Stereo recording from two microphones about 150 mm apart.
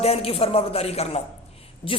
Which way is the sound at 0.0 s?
40° left (ahead or behind).